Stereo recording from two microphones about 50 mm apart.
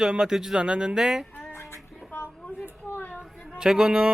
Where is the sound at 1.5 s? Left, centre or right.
Left.